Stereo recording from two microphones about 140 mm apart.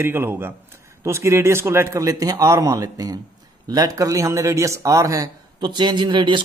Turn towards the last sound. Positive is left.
turn(degrees=-35)  # may be behind; listen again after turning